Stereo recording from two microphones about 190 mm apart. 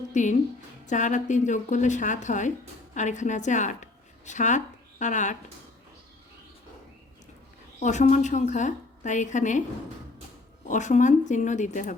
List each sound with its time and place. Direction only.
0.1 s a woman's voice: 40° left (ahead or behind)
7.8 s a woman's voice: 40° left (ahead or behind)
10.7 s a woman's voice: 40° left (ahead or behind)